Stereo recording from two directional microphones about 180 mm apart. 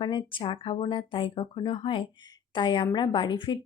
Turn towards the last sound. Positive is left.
turn(degrees=25)  # may be behind; listen again after turning